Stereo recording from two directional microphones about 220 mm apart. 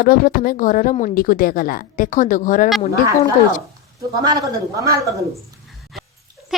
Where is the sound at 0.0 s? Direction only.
40° left (ahead or behind).